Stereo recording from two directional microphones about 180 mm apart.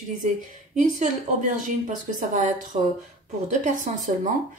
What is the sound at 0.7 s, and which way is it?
A man's voice, 45° right (ahead or behind).